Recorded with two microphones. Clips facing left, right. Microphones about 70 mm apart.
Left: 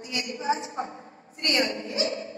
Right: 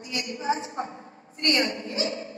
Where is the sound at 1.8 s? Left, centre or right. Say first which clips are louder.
Left 1 dB; right.